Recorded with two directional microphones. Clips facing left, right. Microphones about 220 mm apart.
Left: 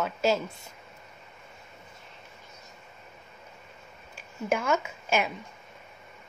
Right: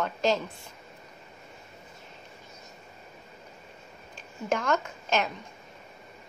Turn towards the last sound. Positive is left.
turn(degrees=10)  # may be behind; listen again after turning